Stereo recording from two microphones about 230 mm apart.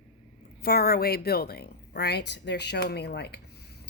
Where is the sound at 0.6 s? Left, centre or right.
Left.